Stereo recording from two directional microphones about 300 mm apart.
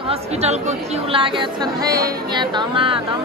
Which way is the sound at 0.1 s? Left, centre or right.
Right.